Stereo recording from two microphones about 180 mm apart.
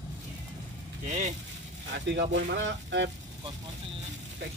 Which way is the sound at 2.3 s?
90° right.